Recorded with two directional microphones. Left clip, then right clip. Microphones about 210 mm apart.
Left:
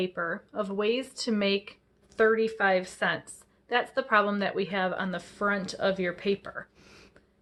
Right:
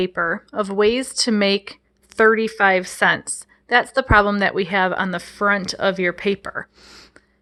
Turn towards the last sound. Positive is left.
turn(degrees=-45)  # may be behind; listen again after turning